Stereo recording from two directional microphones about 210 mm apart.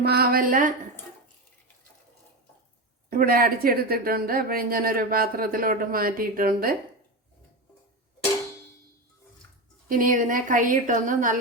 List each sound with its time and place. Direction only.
0.0 s speech: 45° right (ahead or behind)
3.1 s speech: 45° right (ahead or behind)
9.9 s a woman's voice: 40° right (ahead or behind)